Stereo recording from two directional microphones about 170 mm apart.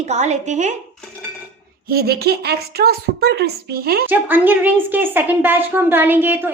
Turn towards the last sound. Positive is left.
turn(degrees=-10)  # may be behind; listen again after turning